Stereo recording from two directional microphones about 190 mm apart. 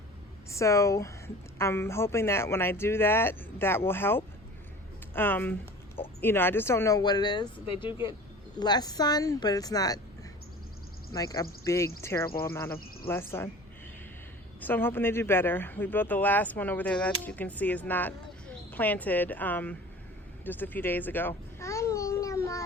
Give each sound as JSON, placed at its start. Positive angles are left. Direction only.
{"t": 0.5, "sound": "speech", "side_deg": 15}
{"t": 11.1, "sound": "speech", "side_deg": 20}
{"t": 14.6, "sound": "speech", "side_deg": 10}
{"t": 20.4, "sound": "babbling", "side_deg": 10}